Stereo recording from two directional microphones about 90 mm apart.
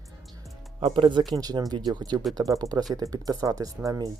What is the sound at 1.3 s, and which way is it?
Speech, 45° right (ahead or behind).